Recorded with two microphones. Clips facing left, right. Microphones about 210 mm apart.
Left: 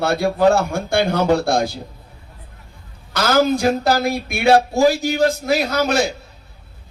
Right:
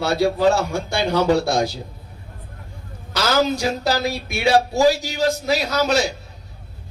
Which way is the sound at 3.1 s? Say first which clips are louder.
Left 3 dB; 55° left (ahead or behind).